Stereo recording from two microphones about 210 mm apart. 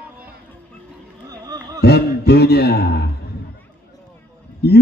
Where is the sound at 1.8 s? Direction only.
50° left (ahead or behind).